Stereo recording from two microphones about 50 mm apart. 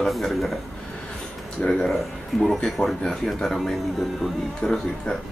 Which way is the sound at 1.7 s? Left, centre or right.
Centre.